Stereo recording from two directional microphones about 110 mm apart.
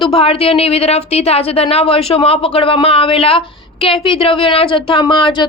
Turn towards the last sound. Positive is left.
turn(degrees=45)  # may be behind; listen again after turning